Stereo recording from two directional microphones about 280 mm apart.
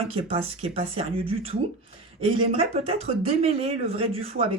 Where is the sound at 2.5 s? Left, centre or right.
Right.